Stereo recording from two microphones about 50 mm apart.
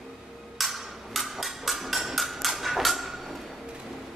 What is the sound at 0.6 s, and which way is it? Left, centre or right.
Percussion, centre.